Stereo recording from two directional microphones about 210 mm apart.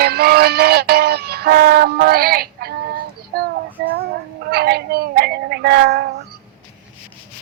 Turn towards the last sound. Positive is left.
turn(degrees=-50)  # may be behind; listen again after turning